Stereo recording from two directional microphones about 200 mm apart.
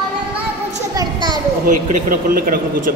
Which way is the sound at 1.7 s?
40° right (ahead or behind).